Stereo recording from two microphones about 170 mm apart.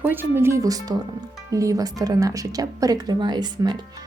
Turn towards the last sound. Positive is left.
turn(degrees=-25)  # may be behind; listen again after turning